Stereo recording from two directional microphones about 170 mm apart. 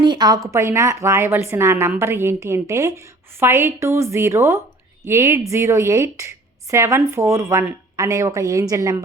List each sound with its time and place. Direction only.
0.0 s a woman's voice: 25° right (ahead or behind)